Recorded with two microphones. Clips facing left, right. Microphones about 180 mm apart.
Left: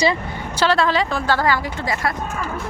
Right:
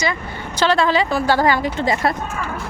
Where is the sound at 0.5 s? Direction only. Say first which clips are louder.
Right 1 dB; centre (ahead or behind).